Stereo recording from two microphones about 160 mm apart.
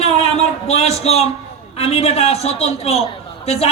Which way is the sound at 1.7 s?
40° left (ahead or behind).